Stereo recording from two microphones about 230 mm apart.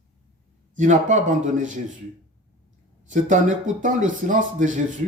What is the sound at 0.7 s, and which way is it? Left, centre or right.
Speech, right.